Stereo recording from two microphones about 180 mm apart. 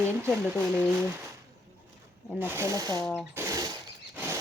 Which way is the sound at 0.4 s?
10° right (ahead or behind).